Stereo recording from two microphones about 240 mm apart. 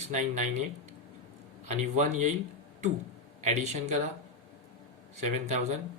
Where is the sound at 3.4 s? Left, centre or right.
Right.